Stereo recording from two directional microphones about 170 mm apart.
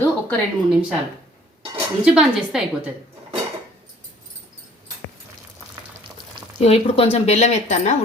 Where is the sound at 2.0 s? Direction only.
5° right (ahead or behind).